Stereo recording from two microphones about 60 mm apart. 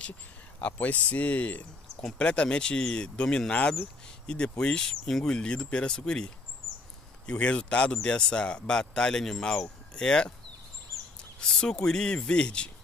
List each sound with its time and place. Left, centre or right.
0.6 s speech: left
11.3 s speech: centre